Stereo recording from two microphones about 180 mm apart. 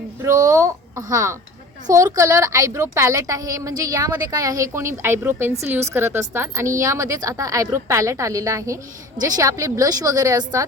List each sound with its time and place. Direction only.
0.2 s a woman's voice: 15° right (ahead or behind)